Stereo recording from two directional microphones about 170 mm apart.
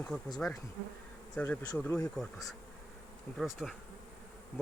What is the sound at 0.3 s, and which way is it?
Speech, 5° left (ahead or behind).